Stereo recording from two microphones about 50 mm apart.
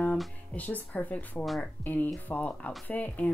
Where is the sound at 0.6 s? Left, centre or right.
Left.